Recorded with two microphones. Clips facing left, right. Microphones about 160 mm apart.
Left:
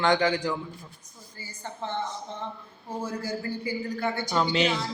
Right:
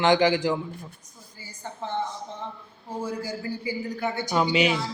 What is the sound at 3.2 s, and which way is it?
Speech, 15° right (ahead or behind).